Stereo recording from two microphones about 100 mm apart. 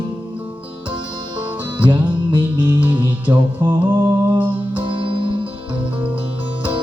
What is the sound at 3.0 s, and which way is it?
Music, 45° right (ahead or behind).